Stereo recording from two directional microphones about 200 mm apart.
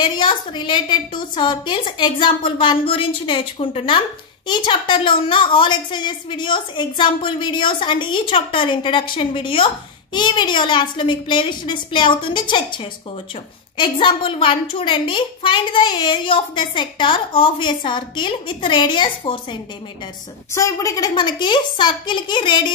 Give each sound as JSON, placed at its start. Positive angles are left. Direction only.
{"t": 0.0, "sound": "a woman's voice", "side_deg": 25}